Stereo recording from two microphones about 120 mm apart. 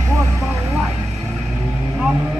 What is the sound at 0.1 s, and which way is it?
Vehicle, 25° right (ahead or behind).